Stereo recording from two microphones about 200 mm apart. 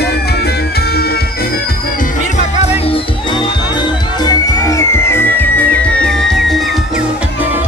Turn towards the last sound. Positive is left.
turn(degrees=5)  # may be behind; listen again after turning